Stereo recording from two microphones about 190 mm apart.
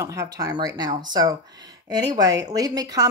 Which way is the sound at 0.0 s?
15° right (ahead or behind).